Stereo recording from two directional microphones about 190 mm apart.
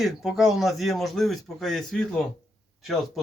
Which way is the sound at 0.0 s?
Centre (ahead or behind).